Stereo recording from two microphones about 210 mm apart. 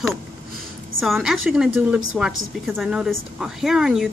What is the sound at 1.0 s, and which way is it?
A woman's voice, centre (ahead or behind).